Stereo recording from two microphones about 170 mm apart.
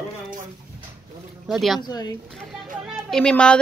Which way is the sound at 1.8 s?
25° left (ahead or behind).